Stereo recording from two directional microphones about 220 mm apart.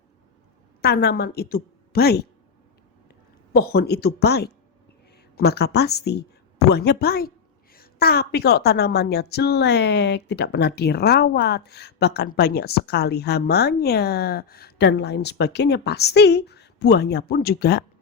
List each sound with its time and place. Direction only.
0.8 s a woman's voice: 45° left (ahead or behind)
3.5 s a woman's voice: 45° left (ahead or behind)